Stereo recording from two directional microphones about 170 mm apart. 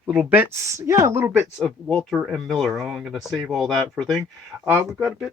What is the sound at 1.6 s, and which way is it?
Speech, 5° left (ahead or behind).